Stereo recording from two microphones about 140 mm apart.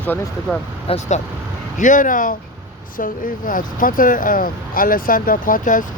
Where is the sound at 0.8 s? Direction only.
50° left (ahead or behind).